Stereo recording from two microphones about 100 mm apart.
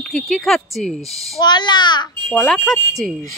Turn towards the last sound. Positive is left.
turn(degrees=0)  # may be behind; listen again after turning